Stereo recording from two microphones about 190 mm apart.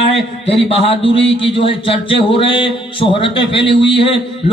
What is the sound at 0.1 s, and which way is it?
A man's voice, 30° left (ahead or behind).